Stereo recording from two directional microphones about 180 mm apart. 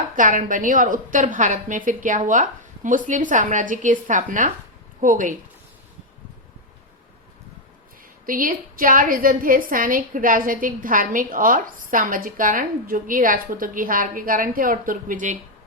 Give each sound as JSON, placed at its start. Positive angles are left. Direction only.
{"t": 0.2, "sound": "a woman's voice", "side_deg": -50}
{"t": 8.3, "sound": "a woman's voice", "side_deg": -50}